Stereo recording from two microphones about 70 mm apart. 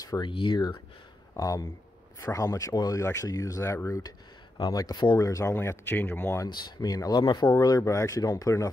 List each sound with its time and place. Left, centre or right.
0.0 s speech: left
1.3 s speech: left
2.1 s speech: left
2.7 s speech: left
3.0 s speech: left
4.6 s speech: left
6.5 s speech: left
7.5 s speech: left